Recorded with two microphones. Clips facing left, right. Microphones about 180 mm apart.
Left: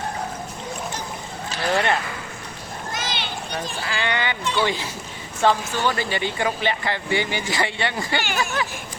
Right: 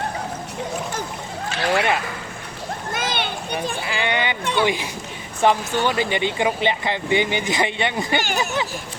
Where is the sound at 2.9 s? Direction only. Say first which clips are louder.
Right 4 dB; 55° right (ahead or behind).